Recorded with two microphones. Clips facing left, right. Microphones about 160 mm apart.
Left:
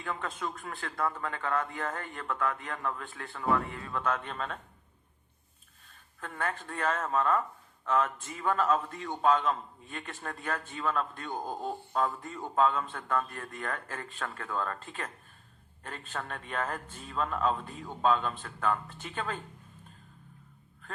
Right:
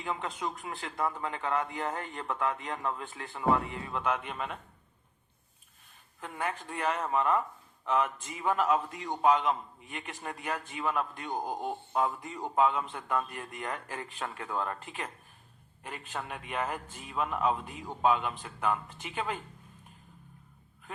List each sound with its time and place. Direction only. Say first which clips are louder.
0.0 s a man's voice: right 1 dB; 20° right (ahead or behind)
6.1 s a man's voice: even; 15° right (ahead or behind)